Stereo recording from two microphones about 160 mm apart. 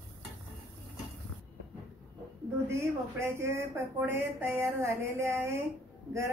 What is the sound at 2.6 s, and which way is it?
Speech, 15° right (ahead or behind).